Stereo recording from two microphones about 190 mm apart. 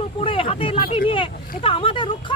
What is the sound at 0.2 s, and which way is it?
Speech, 30° left (ahead or behind).